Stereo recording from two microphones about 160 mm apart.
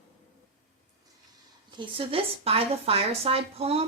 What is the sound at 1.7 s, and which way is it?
Speech, 35° right (ahead or behind).